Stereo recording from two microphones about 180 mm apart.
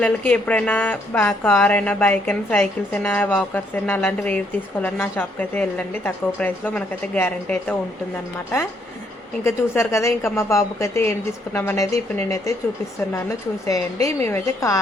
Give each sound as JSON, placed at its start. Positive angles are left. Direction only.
{"t": 0.0, "sound": "a woman's voice", "side_deg": 10}
{"t": 9.4, "sound": "a woman's voice", "side_deg": 15}
{"t": 13.7, "sound": "a woman's voice", "side_deg": 15}